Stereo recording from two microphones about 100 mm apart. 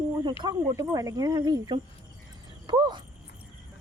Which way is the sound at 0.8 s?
40° right (ahead or behind).